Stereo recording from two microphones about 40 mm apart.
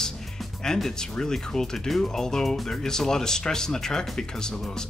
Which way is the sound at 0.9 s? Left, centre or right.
Centre.